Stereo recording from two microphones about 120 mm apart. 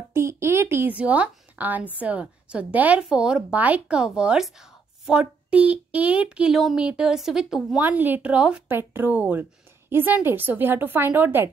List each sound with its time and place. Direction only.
0.1 s a woman's voice: 25° right (ahead or behind); by 7.8 s 5° right (ahead or behind)
7.8 s a woman's voice: 15° right (ahead or behind)